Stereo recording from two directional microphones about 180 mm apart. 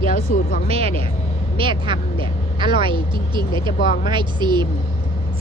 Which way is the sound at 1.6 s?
25° right (ahead or behind).